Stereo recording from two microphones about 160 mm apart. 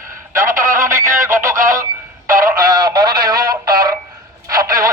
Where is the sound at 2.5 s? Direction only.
25° right (ahead or behind).